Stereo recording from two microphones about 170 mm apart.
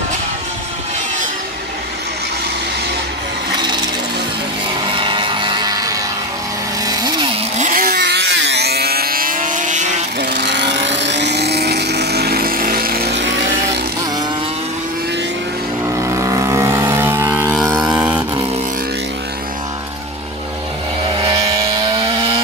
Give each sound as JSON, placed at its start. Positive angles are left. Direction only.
{"t": 3.5, "sound": "a sound", "side_deg": -25}
{"t": 4.8, "sound": "music", "side_deg": -30}
{"t": 6.8, "sound": "chainsaw", "side_deg": -20}
{"t": 7.5, "sound": "vehicle", "side_deg": -50}
{"t": 10.2, "sound": "vehicle", "side_deg": -85}
{"t": 16.0, "sound": "vehicle", "side_deg": -20}
{"t": 17.6, "sound": "vehicle", "side_deg": -20}
{"t": 21.1, "sound": "vehicle", "side_deg": -30}